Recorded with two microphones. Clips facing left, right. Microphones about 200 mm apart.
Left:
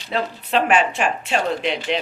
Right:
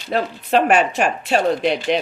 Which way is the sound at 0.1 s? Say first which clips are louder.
Right 3 dB; 45° right (ahead or behind).